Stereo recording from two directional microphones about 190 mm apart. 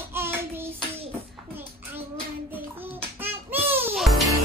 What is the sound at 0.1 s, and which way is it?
Child singing, 10° right (ahead or behind).